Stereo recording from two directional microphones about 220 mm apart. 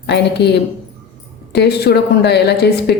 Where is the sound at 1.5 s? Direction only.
50° left (ahead or behind).